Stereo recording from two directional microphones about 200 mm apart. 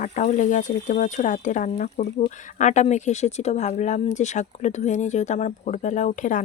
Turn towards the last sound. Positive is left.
turn(degrees=40)  # may be behind; listen again after turning